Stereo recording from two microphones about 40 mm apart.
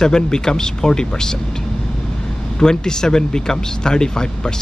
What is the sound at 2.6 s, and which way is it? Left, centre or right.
Speech, centre.